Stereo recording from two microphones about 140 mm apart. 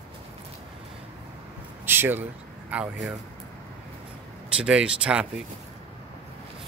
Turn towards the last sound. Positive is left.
turn(degrees=-5)  # may be behind; listen again after turning